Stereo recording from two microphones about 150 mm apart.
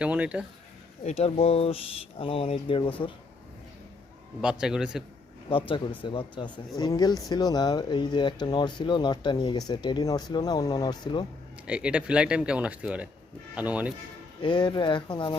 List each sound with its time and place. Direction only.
0.0 s speech: 10° right (ahead or behind)
1.0 s speech: 45° left (ahead or behind)
4.4 s a man's voice: 5° right (ahead or behind)
5.5 s speech: 35° left (ahead or behind)
11.6 s speech: 5° right (ahead or behind)
14.4 s speech: 30° left (ahead or behind)